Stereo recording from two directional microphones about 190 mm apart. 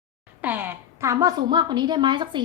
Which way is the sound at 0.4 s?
10° right (ahead or behind).